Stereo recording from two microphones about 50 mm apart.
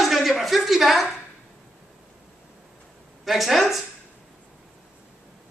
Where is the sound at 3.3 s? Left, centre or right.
Centre.